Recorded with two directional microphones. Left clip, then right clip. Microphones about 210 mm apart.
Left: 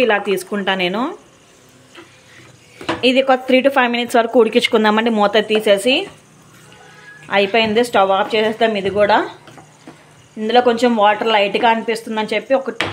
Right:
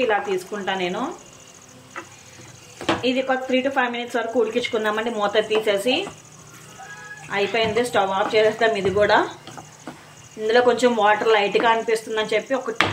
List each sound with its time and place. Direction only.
0.0 s a woman's voice: 55° left (ahead or behind)
3.0 s a woman's voice: 55° left (ahead or behind)
7.2 s a woman's voice: 45° left (ahead or behind)
10.4 s a woman's voice: 35° left (ahead or behind)